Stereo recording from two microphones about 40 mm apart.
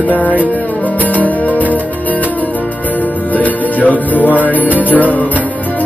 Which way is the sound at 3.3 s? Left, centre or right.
Left.